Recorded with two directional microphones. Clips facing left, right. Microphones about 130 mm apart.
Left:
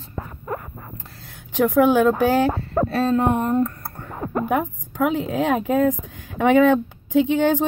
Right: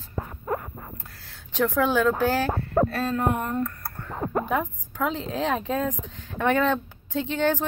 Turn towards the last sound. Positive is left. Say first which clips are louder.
# left 7 dB
turn(degrees=15)  # may be behind; listen again after turning